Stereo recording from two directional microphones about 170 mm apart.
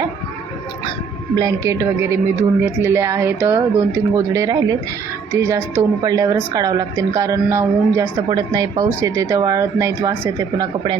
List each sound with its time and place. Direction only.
1.4 s a woman's voice: 20° right (ahead or behind)